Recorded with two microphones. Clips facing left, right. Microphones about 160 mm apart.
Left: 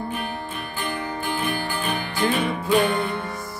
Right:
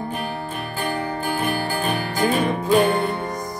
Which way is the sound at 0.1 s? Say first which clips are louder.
Right 2 dB; 40° right (ahead or behind).